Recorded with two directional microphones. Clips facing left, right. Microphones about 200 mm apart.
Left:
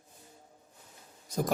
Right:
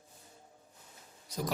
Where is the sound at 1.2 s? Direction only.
50° left (ahead or behind).